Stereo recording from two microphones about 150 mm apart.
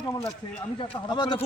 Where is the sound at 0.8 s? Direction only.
30° left (ahead or behind).